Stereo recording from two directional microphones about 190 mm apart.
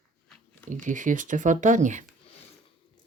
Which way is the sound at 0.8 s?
40° right (ahead or behind).